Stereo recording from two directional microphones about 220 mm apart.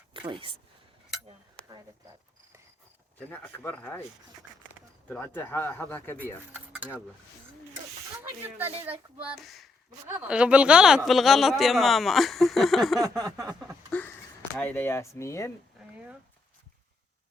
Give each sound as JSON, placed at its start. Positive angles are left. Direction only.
{"t": 0.1, "sound": "a sound", "side_deg": -20}
{"t": 3.2, "sound": "speech", "side_deg": 10}
{"t": 5.0, "sound": "speech", "side_deg": 5}
{"t": 8.2, "sound": "speech", "side_deg": -10}
{"t": 13.0, "sound": "a sound", "side_deg": -15}
{"t": 13.5, "sound": "speech", "side_deg": 0}